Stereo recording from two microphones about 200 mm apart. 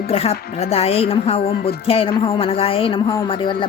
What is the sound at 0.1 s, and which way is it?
A woman's voice, 30° left (ahead or behind).